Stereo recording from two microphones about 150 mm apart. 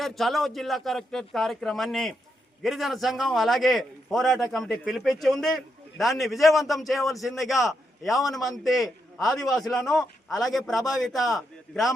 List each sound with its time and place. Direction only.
0.0 s a man's voice: centre (ahead or behind)